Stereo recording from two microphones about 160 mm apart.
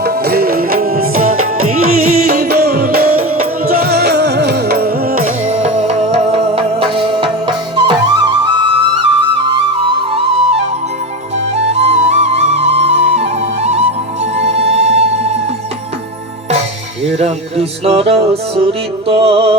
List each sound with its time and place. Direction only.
0.0 s music: 80° right; by 8.8 s 30° right (ahead or behind)
11.7 s music: 40° right (ahead or behind)
17.2 s music: 40° right (ahead or behind)